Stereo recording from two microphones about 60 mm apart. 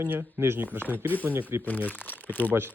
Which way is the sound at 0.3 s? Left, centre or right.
Right.